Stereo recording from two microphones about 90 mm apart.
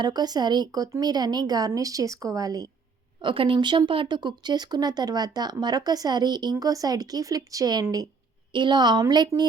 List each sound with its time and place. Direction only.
0.0 s speech: 50° right (ahead or behind)
3.2 s speech: 70° right (ahead or behind); by 8.0 s 45° right (ahead or behind)
8.5 s speech: 60° right (ahead or behind)